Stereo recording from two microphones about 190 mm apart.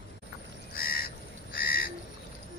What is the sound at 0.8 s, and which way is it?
Crow, 50° left (ahead or behind).